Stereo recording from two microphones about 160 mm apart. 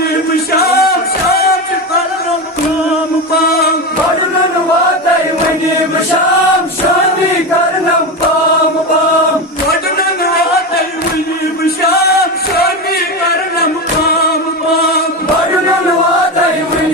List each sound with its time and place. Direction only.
0.5 s music: 75° left (ahead or behind)
11.8 s music: 75° left (ahead or behind)